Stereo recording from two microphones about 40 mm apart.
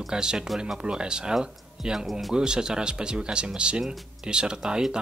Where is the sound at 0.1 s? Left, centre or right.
Centre.